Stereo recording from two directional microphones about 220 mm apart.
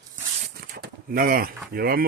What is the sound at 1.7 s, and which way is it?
Speech, 40° right (ahead or behind).